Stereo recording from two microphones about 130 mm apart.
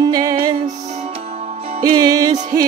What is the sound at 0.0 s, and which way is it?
Music, 30° right (ahead or behind).